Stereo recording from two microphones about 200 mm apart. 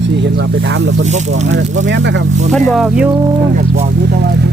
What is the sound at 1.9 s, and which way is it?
Speech, 65° right (ahead or behind).